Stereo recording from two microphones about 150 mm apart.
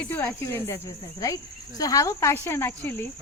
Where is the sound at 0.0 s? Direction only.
10° left (ahead or behind).